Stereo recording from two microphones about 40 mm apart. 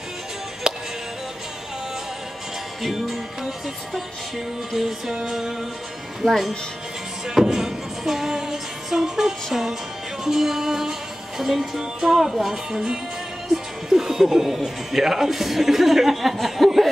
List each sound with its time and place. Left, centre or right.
0.7 s music: centre
2.8 s music: centre
4.7 s speech: centre
6.2 s speech: centre
7.2 s music: centre
12.0 s speech: centre